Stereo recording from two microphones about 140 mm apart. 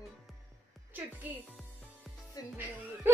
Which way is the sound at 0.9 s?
10° right (ahead or behind).